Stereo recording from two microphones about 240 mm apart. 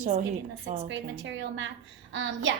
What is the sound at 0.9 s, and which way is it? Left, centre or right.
A woman's voice, right.